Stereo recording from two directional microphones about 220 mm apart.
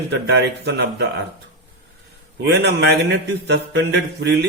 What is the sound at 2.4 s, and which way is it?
A man's voice, 50° right (ahead or behind).